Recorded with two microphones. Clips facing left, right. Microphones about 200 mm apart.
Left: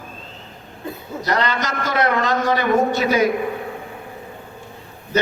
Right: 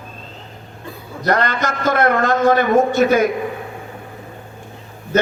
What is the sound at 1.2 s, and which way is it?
A man's voice, 50° right (ahead or behind).